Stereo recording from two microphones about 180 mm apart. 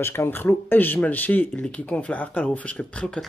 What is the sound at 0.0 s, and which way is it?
Speech, 15° left (ahead or behind).